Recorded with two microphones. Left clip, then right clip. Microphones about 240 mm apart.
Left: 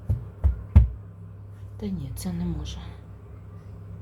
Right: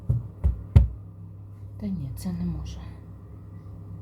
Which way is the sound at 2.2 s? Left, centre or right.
Left.